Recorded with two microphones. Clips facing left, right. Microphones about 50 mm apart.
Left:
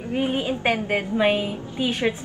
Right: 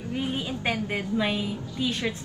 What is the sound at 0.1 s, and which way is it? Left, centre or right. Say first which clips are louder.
A woman's voice: left 6 dB; left.